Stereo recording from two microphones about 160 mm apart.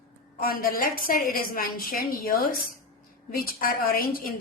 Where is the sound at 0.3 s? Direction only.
65° left (ahead or behind).